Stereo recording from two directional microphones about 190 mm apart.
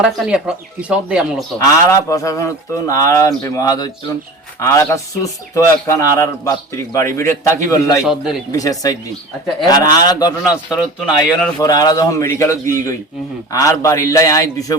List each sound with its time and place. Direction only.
0.0 s speech: 5° right (ahead or behind)
1.5 s speech: 15° left (ahead or behind)
8.0 s speech: centre (ahead or behind)
8.5 s a man's voice: 20° left (ahead or behind)
11.0 s speech: 5° left (ahead or behind)
11.6 s speech: 20° left (ahead or behind)